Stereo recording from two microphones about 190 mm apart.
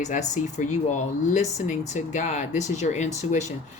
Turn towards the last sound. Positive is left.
turn(degrees=40)  # may be behind; listen again after turning